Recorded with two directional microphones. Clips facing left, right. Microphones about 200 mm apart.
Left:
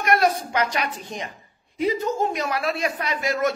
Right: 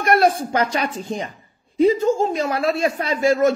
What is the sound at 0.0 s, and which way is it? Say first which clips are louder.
A woman's voice: right 4 dB; 30° right (ahead or behind).